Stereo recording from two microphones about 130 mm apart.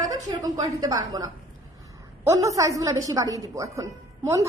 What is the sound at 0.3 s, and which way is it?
A woman's voice, 30° right (ahead or behind).